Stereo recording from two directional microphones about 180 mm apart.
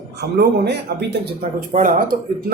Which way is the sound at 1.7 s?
50° right (ahead or behind).